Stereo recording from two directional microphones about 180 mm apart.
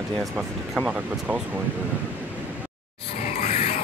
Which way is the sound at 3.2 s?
40° left (ahead or behind).